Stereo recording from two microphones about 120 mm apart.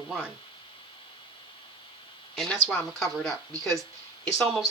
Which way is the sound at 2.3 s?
5° left (ahead or behind).